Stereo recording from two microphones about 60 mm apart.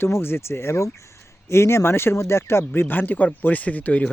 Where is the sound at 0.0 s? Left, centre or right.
Left.